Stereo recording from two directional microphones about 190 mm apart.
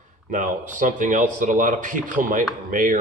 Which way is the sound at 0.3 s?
45° right (ahead or behind).